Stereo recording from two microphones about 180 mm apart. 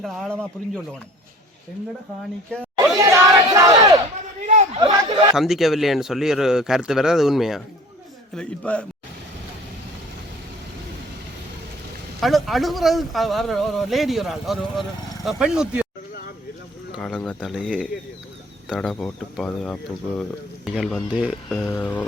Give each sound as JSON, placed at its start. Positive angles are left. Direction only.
{"t": 0.0, "sound": "speech", "side_deg": 0}
{"t": 2.7, "sound": "crowd", "side_deg": -15}
{"t": 4.4, "sound": "a sound", "side_deg": -40}
{"t": 4.8, "sound": "a sound", "side_deg": -25}
{"t": 5.3, "sound": "speech", "side_deg": 0}
{"t": 12.2, "sound": "speech", "side_deg": 0}
{"t": 16.9, "sound": "speech", "side_deg": 5}